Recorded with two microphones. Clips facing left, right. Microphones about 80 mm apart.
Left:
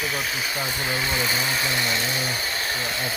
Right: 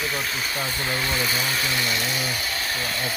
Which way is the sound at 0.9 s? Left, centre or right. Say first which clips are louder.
Even; centre.